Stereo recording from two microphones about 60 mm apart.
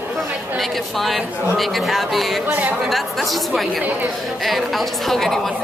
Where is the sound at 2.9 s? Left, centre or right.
Centre.